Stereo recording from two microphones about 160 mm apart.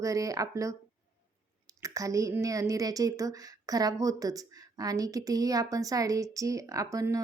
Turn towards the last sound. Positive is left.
turn(degrees=-20)  # may be behind; listen again after turning